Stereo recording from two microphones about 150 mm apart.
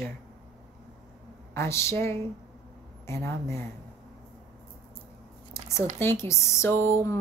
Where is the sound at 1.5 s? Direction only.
20° left (ahead or behind).